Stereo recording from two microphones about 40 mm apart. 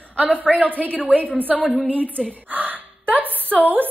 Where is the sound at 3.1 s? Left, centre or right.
Right.